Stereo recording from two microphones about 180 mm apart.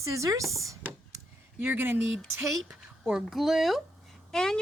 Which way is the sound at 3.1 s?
Centre (ahead or behind).